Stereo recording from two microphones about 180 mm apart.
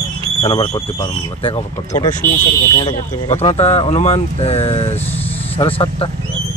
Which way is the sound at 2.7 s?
25° left (ahead or behind).